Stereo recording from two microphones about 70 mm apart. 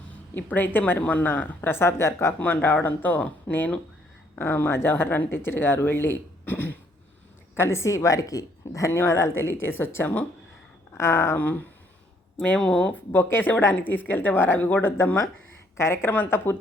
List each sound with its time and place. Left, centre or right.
0.3 s speech: left
2.4 s speech: left
7.5 s speech: left
8.9 s speech: left
11.3 s speech: left
13.2 s speech: left